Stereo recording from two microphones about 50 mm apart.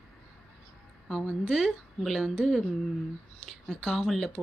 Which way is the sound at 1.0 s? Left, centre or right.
Centre.